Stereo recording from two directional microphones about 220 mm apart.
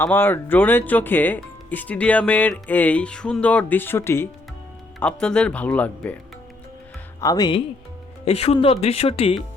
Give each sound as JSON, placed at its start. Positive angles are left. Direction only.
{"t": 0.0, "sound": "speech", "side_deg": 10}
{"t": 7.2, "sound": "speech", "side_deg": 15}